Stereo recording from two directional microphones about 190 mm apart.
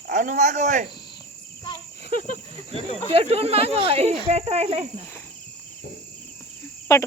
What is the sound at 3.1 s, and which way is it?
Speech, 30° right (ahead or behind).